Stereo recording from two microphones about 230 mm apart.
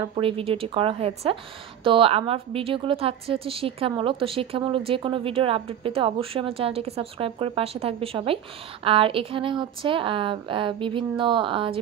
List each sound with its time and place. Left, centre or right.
0.1 s a woman's voice: right